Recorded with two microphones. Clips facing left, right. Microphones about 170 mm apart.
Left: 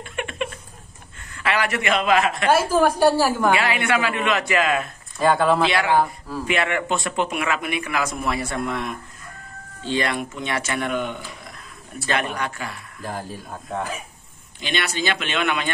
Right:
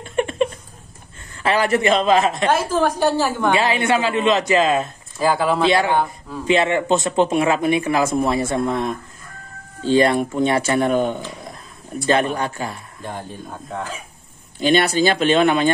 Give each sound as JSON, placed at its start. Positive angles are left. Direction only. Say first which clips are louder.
{"t": 0.1, "sound": "a sound", "louder": "right 9 dB", "side_deg": -35}
{"t": 1.3, "sound": "speech", "louder": "right 5 dB", "side_deg": -30}
{"t": 2.4, "sound": "a woman's voice", "louder": "even", "side_deg": 10}
{"t": 3.5, "sound": "speech", "louder": "right 3 dB", "side_deg": -25}
{"t": 5.2, "sound": "speech", "louder": "even", "side_deg": 0}
{"t": 5.7, "sound": "speech", "louder": "right 4 dB", "side_deg": -30}
{"t": 5.9, "sound": "speech", "louder": "left 1 dB", "side_deg": 5}
{"t": 6.4, "sound": "speech", "louder": "right 6 dB", "side_deg": -25}
{"t": 13.0, "sound": "speech", "louder": "even", "side_deg": 0}
{"t": 14.6, "sound": "speech", "louder": "right 10 dB", "side_deg": -40}